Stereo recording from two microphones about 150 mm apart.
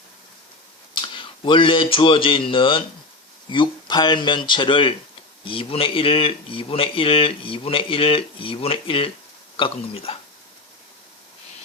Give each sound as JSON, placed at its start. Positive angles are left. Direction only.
{"t": 1.0, "sound": "speech", "side_deg": 35}